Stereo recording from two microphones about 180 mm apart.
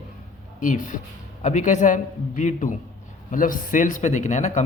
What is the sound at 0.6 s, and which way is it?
A man's voice, 45° left (ahead or behind).